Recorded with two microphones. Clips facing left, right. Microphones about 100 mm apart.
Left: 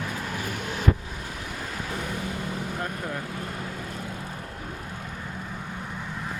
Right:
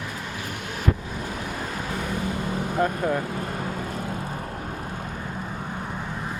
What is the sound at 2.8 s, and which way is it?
Speech, 60° right (ahead or behind).